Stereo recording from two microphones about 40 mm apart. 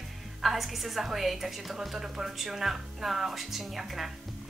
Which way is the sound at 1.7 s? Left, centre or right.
Centre.